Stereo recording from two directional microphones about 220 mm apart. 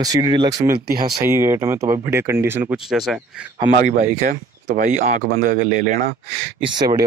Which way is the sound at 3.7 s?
35° right (ahead or behind).